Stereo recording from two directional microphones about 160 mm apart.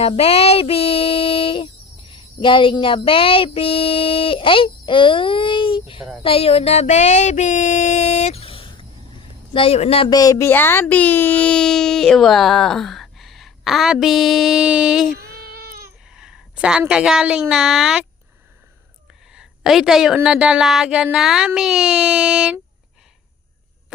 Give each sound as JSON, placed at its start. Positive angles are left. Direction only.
{"t": 0.0, "sound": "female singing", "side_deg": 40}
{"t": 2.0, "sound": "a sound", "side_deg": 30}
{"t": 9.5, "sound": "speech", "side_deg": 35}
{"t": 10.1, "sound": "a child's voice", "side_deg": 25}
{"t": 15.2, "sound": "cat", "side_deg": -75}
{"t": 16.0, "sound": "a sound", "side_deg": -5}
{"t": 16.9, "sound": "a child's voice", "side_deg": -5}
{"t": 19.3, "sound": "a sound", "side_deg": -5}
{"t": 20.1, "sound": "a child's voice", "side_deg": -5}